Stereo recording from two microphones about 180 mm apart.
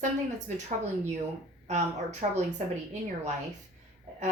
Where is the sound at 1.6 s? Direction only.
40° right (ahead or behind).